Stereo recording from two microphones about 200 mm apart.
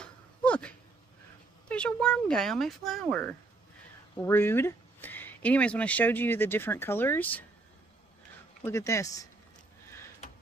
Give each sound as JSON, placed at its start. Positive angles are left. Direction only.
{"t": 0.0, "sound": "a sound", "side_deg": 5}
{"t": 1.7, "sound": "speech", "side_deg": 5}
{"t": 8.6, "sound": "speech", "side_deg": 15}